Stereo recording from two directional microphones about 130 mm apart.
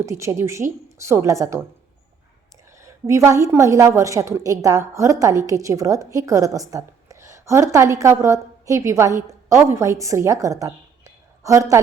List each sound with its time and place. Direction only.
0.0 s a woman's voice: 20° right (ahead or behind)
2.7 s a woman's voice: 20° right (ahead or behind)